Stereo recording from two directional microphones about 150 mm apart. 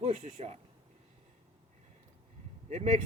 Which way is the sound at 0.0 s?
50° right (ahead or behind).